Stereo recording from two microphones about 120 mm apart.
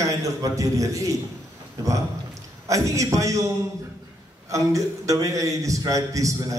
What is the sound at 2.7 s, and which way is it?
Speech, 25° right (ahead or behind).